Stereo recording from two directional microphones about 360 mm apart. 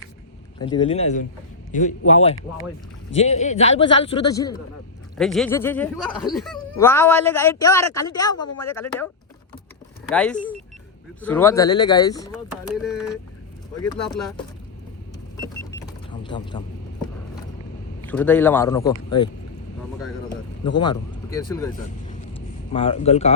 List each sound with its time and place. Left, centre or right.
0.6 s a man's voice: centre
10.1 s a man's voice: centre
13.7 s speech: centre
16.2 s speech: centre
18.0 s a man's voice: centre
20.7 s a man's voice: centre
22.3 s a sound: centre